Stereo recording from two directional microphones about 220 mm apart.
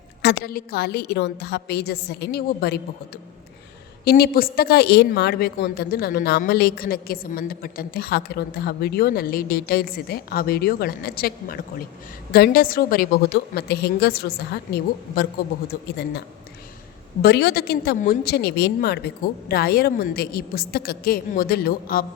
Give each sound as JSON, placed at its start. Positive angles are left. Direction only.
{"t": 0.2, "sound": "a woman's voice", "side_deg": 45}
{"t": 4.0, "sound": "a woman's voice", "side_deg": 45}
{"t": 17.2, "sound": "a woman's voice", "side_deg": 50}